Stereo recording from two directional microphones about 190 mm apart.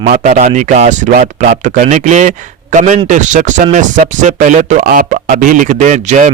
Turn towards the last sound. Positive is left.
turn(degrees=-40)  # may be behind; listen again after turning